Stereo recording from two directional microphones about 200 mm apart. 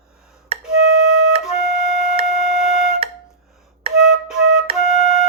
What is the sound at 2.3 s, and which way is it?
Music, 30° left (ahead or behind).